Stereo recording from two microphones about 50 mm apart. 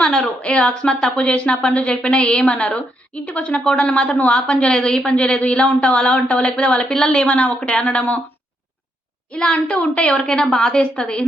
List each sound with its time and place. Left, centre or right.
0.0 s a woman's voice: centre
9.3 s a woman's voice: centre